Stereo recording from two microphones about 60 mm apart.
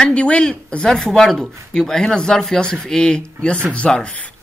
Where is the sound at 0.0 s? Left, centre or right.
Centre.